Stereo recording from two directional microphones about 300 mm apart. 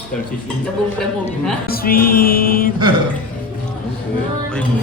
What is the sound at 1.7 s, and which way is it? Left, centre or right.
Mantra, left.